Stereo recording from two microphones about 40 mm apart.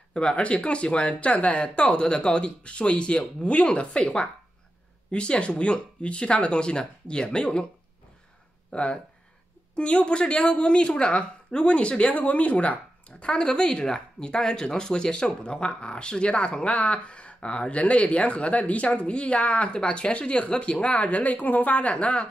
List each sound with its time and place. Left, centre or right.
0.1 s a woman's voice: left
13.2 s speech: left
20.9 s a woman's voice: left
21.9 s speech: left